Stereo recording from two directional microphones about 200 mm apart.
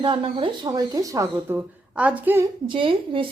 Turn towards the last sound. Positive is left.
turn(degrees=-25)  # may be behind; listen again after turning